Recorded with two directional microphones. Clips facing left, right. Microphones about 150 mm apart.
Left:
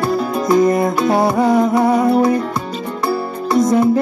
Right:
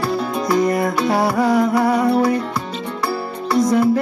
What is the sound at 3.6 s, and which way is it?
Music, 20° left (ahead or behind).